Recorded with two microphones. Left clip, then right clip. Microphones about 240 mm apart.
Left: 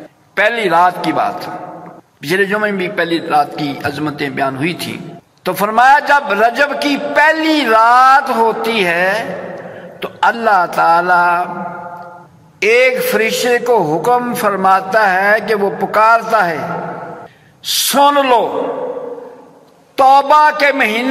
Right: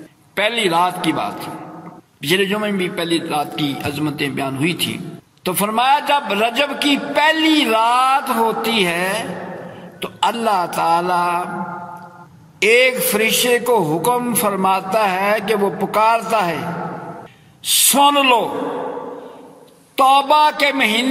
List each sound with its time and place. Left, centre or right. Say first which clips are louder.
0.4 s a man's voice: left 5 dB; right
12.5 s a man's voice: left 3 dB; right
17.6 s a man's voice: left 3 dB; right
20.0 s a man's voice: left 4 dB; right